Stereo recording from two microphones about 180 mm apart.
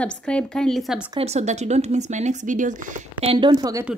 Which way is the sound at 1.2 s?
40° right (ahead or behind).